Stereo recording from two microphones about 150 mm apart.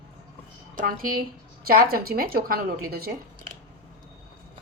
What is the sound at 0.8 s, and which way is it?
A woman's voice, 70° right (ahead or behind).